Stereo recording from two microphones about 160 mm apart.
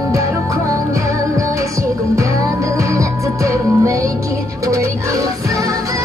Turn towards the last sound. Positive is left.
turn(degrees=-20)  # may be behind; listen again after turning